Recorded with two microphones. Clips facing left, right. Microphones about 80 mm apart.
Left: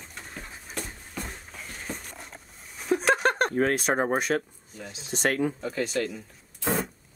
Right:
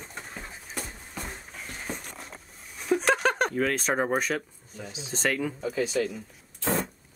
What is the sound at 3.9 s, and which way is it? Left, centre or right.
Speech, left.